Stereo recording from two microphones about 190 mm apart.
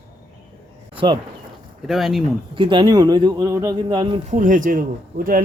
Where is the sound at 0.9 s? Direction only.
25° right (ahead or behind).